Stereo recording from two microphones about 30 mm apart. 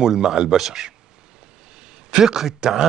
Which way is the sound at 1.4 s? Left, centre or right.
Right.